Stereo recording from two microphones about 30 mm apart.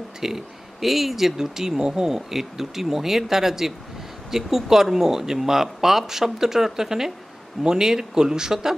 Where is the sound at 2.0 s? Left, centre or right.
Centre.